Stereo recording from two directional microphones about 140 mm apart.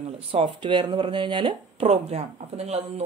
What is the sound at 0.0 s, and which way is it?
Speech, 40° right (ahead or behind).